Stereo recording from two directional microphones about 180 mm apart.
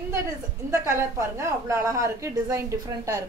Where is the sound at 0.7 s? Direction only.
15° right (ahead or behind).